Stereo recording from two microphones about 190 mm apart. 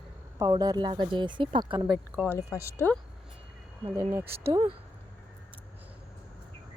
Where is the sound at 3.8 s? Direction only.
10° right (ahead or behind).